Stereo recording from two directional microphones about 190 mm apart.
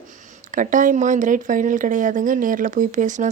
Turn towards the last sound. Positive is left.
turn(degrees=-40)  # may be behind; listen again after turning